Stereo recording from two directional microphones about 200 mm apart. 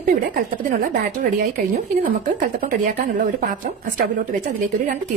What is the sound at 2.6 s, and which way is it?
Speech, 40° right (ahead or behind).